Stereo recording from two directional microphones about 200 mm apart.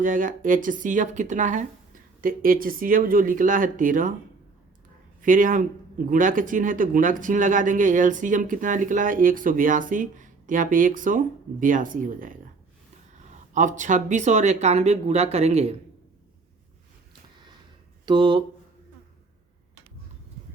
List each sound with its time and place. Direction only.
0.0 s speech: 40° right (ahead or behind)
5.2 s speech: 40° right (ahead or behind)
13.5 s speech: 40° right (ahead or behind)
18.0 s speech: 25° right (ahead or behind)